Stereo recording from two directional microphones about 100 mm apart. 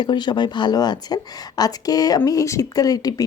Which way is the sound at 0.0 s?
50° left (ahead or behind).